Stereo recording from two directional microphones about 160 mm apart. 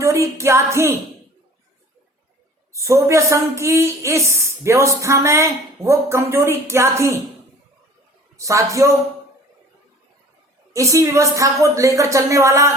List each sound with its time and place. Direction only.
0.0 s a woman's voice: 20° right (ahead or behind)
2.7 s a woman's voice: 20° right (ahead or behind)
8.4 s speech: 20° right (ahead or behind)
10.7 s speech: 20° right (ahead or behind)